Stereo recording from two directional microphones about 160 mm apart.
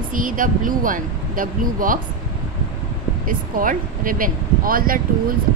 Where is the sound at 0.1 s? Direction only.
60° right (ahead or behind).